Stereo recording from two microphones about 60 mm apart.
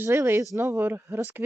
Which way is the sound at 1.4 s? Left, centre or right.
Right.